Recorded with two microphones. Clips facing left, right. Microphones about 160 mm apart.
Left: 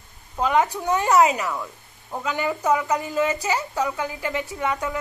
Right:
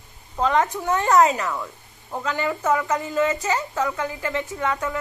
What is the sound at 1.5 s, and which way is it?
Speech, centre (ahead or behind).